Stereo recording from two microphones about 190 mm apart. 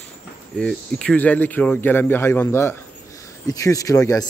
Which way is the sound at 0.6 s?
5° left (ahead or behind).